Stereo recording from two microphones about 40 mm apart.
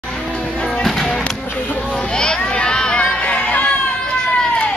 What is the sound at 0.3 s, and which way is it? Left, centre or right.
Music, left.